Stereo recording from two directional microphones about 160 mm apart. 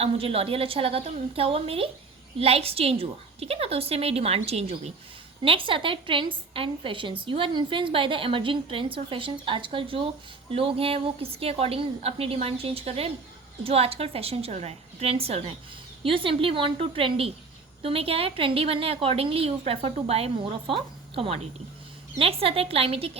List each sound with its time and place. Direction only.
0.0 s a woman's voice: 35° right (ahead or behind)